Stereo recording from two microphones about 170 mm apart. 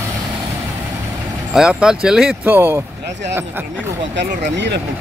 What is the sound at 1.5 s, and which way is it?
Speech, 5° right (ahead or behind).